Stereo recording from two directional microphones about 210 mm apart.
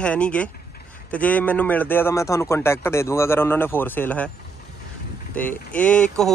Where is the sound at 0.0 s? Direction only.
5° left (ahead or behind).